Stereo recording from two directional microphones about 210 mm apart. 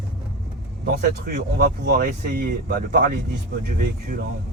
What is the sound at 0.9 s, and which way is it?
Speech, 55° right (ahead or behind).